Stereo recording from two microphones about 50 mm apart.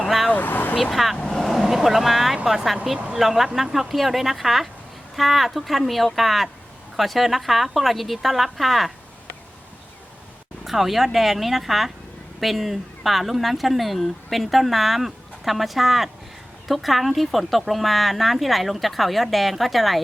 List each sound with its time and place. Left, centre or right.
0.0 s vehicle: centre
0.3 s vehicle: left
0.8 s speech: centre
1.1 s speech: centre
10.6 s speech: centre